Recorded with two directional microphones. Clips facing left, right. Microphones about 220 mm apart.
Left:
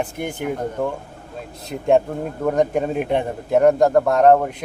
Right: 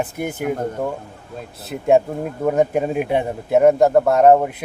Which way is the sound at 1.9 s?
5° right (ahead or behind).